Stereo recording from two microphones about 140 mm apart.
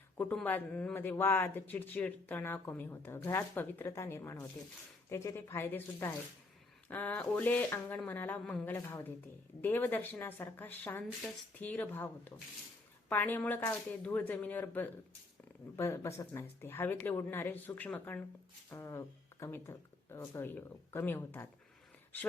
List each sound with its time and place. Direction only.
0.4 s speech: 10° left (ahead or behind)